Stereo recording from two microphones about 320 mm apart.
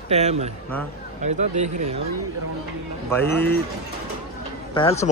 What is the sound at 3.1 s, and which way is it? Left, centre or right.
Speech, centre.